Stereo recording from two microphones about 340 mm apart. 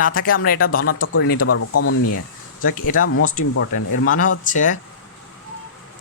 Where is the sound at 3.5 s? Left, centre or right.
Left.